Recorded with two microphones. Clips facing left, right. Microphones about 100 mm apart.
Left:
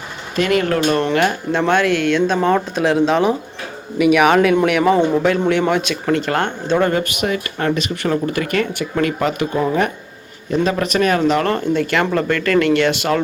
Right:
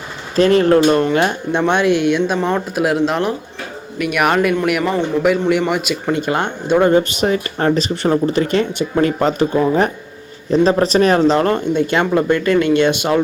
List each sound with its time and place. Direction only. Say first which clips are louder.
0.3 s speech: right 5 dB; 35° right (ahead or behind); by 4.5 s centre (ahead or behind)
4.8 s speech: left 4 dB; 10° left (ahead or behind)
5.5 s speech: even; 5° right (ahead or behind)
6.9 s speech: right 5 dB; 30° right (ahead or behind)
10.5 s speech: right 5 dB; 30° right (ahead or behind)